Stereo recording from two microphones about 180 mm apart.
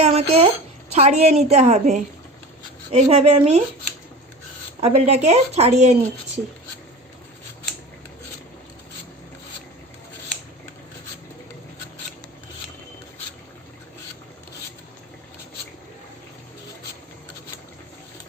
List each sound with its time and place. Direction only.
0.0 s speech: 35° right (ahead or behind)
4.8 s speech: 35° right (ahead or behind)